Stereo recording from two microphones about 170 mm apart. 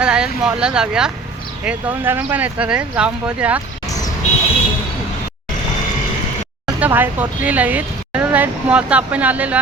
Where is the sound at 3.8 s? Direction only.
20° left (ahead or behind).